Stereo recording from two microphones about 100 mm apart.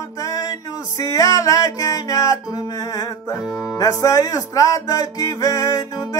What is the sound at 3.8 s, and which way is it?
Music, 35° left (ahead or behind).